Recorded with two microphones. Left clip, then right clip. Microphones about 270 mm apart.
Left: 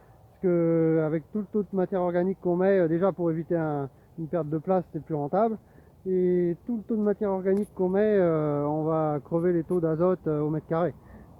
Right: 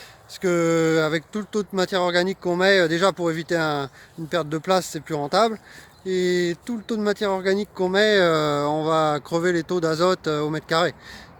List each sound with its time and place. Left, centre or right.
0.4 s speech: centre